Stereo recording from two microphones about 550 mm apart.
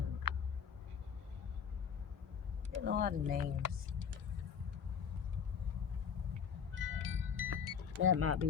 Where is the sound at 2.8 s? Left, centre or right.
Centre.